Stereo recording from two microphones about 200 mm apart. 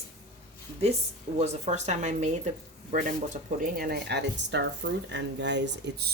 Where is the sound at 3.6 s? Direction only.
45° right (ahead or behind).